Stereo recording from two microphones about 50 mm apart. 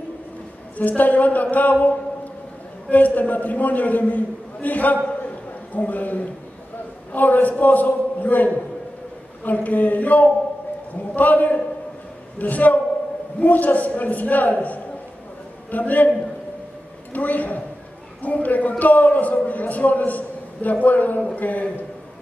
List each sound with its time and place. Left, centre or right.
0.7 s a man's voice: left
17.1 s a man's voice: left